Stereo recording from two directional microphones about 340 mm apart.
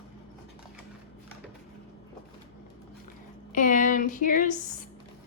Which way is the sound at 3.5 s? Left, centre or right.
Left.